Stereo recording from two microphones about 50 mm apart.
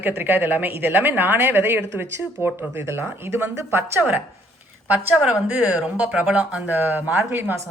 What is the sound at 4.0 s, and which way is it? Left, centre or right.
Speech, right.